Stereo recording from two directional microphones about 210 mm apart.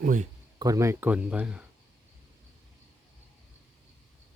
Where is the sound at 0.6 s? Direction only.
15° right (ahead or behind).